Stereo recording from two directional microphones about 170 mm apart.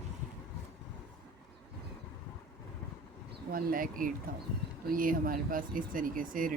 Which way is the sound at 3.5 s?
55° right (ahead or behind).